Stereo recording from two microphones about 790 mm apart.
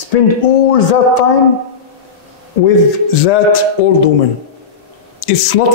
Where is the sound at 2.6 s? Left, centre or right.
Left.